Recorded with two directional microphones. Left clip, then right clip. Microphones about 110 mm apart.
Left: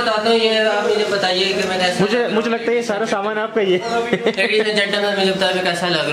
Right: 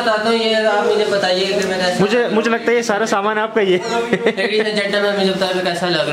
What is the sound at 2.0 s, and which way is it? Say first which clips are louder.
A man's voice: right 2 dB; 5° right (ahead or behind).